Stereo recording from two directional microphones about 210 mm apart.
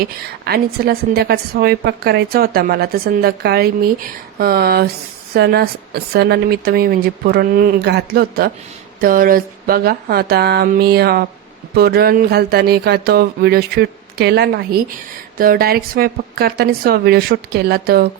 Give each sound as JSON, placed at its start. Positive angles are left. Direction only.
{"t": 0.0, "sound": "a woman's voice", "side_deg": -50}